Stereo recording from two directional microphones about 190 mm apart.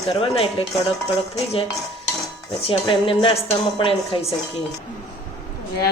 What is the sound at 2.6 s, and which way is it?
Speech, 30° left (ahead or behind).